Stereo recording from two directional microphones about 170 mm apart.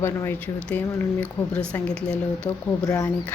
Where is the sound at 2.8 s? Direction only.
20° left (ahead or behind).